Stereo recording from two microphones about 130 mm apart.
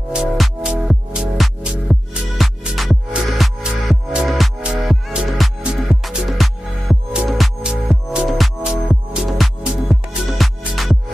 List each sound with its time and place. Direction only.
0.1 s music: 5° right (ahead or behind)